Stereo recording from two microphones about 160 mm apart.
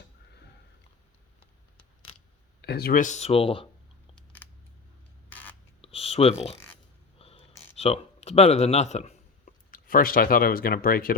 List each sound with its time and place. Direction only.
2.6 s speech: 85° left; by 3.7 s 35° left (ahead or behind)
4.1 s camera: 10° left (ahead or behind)
5.3 s a sound: 10° left (ahead or behind)
5.8 s a sound: 40° left (ahead or behind)
7.8 s speech: 40° left (ahead or behind)
9.7 s speech: 60° left (ahead or behind)